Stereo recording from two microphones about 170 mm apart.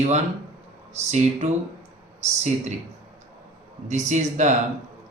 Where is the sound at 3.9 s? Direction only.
45° right (ahead or behind).